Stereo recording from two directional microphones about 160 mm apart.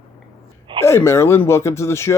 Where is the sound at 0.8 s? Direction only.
15° left (ahead or behind).